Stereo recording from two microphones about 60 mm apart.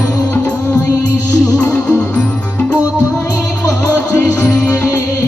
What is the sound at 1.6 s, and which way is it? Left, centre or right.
Music, centre.